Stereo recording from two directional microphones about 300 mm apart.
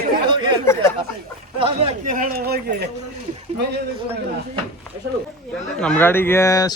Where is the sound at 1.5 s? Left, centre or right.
Centre.